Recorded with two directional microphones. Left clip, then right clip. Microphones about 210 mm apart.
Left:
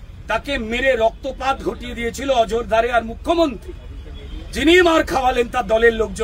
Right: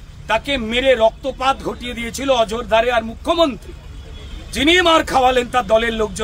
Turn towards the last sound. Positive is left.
turn(degrees=-25)  # may be behind; listen again after turning